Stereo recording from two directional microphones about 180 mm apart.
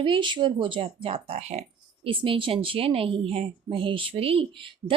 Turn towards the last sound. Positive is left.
turn(degrees=-30)  # may be behind; listen again after turning